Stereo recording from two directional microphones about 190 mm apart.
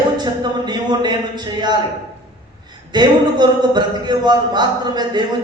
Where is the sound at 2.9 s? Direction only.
25° right (ahead or behind).